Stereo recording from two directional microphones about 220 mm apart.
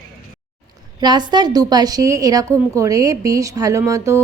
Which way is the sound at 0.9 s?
20° right (ahead or behind).